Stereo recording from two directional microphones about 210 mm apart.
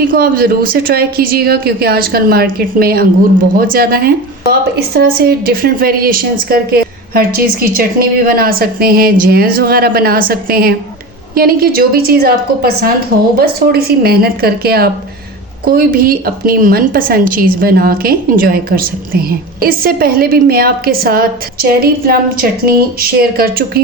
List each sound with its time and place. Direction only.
0.1 s a woman's voice: 45° right (ahead or behind)